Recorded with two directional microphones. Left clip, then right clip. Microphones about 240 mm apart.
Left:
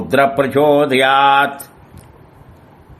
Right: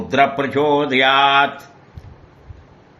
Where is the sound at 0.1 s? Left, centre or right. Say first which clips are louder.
Left 3 dB; left.